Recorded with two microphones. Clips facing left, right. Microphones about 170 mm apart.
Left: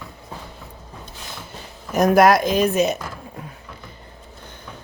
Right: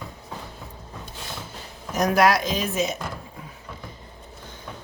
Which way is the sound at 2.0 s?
50° left (ahead or behind).